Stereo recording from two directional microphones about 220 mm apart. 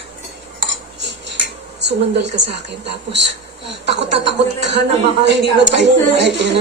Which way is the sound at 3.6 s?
50° right (ahead or behind).